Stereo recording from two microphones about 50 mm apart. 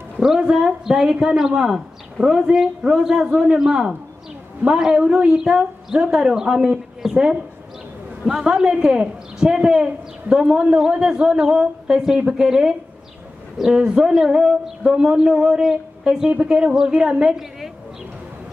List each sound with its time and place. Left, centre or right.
0.2 s speech: centre